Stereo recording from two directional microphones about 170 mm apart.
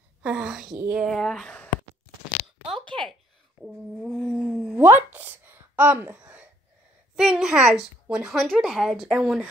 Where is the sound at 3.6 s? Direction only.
Centre (ahead or behind).